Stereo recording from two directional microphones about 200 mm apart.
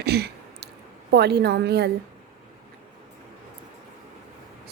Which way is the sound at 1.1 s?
55° right (ahead or behind).